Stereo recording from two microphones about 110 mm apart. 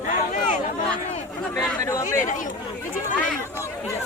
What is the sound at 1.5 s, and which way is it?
Speech, 25° left (ahead or behind).